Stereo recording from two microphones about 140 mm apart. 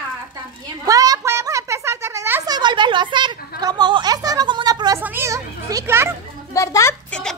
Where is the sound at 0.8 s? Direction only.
25° right (ahead or behind).